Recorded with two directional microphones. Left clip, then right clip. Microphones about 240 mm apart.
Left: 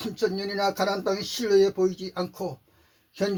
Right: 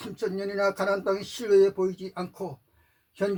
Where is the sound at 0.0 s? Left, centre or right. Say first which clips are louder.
Left 3 dB; left.